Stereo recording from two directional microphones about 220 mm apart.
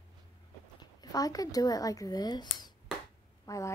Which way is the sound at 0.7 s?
15° left (ahead or behind).